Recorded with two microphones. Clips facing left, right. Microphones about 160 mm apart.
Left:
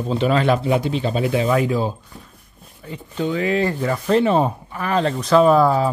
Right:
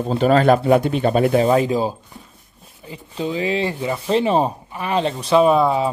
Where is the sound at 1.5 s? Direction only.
20° right (ahead or behind).